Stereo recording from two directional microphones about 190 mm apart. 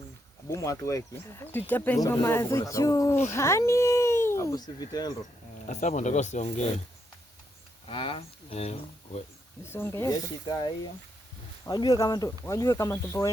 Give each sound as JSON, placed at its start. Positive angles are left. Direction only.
{"t": 0.5, "sound": "speech", "side_deg": 15}
{"t": 5.6, "sound": "speech", "side_deg": 40}
{"t": 7.9, "sound": "speech", "side_deg": 30}
{"t": 9.6, "sound": "speech", "side_deg": 10}